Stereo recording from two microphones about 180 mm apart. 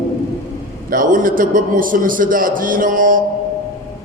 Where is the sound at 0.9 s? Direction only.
50° right (ahead or behind).